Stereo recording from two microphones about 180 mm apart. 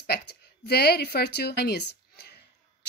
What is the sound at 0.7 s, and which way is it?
Speech, 65° left (ahead or behind).